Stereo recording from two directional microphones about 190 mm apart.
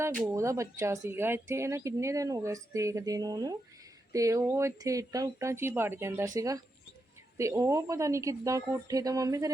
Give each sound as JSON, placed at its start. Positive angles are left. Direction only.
{"t": 0.3, "sound": "speech", "side_deg": -15}